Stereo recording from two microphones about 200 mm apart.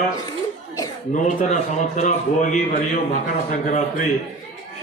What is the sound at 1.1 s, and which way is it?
A man's voice, 35° left (ahead or behind).